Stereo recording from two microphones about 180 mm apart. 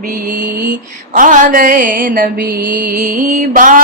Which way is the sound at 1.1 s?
45° right (ahead or behind).